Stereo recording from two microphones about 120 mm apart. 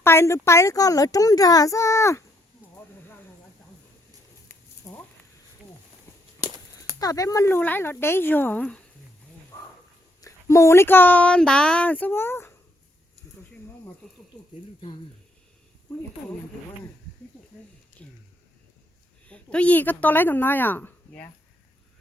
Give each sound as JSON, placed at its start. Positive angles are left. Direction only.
{"t": 0.0, "sound": "a child's voice", "side_deg": 20}
{"t": 4.9, "sound": "a sound", "side_deg": 20}
{"t": 7.0, "sound": "a child's voice", "side_deg": 30}
{"t": 7.4, "sound": "speech", "side_deg": 15}
{"t": 10.2, "sound": "speech", "side_deg": 25}
{"t": 18.0, "sound": "a sound", "side_deg": 10}
{"t": 19.3, "sound": "speech", "side_deg": 10}